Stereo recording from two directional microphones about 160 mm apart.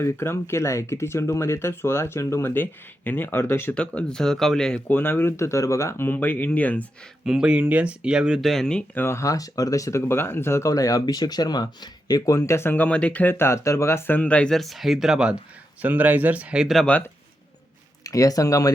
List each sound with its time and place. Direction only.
0.0 s speech: 15° left (ahead or behind)
7.3 s speech: 5° right (ahead or behind)
9.0 s speech: 20° left (ahead or behind); by 17.0 s 5° left (ahead or behind)
18.0 s speech: 20° left (ahead or behind)